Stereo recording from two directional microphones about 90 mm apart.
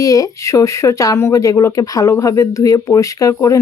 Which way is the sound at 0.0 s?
40° left (ahead or behind).